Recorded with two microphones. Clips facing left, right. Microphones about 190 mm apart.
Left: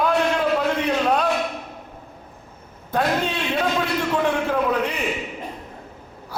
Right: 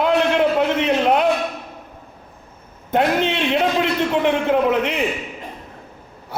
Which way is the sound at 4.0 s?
20° right (ahead or behind).